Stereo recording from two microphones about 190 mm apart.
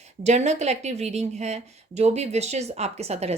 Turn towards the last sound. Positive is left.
turn(degrees=-35)  # may be behind; listen again after turning